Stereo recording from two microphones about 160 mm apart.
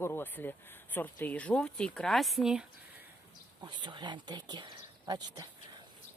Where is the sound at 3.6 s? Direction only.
30° right (ahead or behind).